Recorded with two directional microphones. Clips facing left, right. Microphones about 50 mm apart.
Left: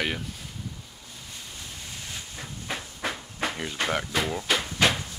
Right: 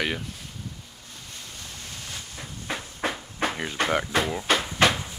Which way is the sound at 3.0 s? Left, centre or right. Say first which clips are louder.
Right 4 dB; right.